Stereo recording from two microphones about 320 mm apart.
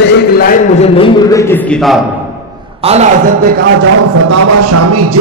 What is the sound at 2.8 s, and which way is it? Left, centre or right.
Speech, right.